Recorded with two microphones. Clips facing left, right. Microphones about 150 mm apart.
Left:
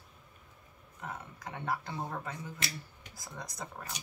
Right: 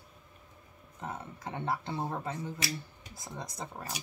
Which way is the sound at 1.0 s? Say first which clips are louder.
Right 3 dB; 25° right (ahead or behind).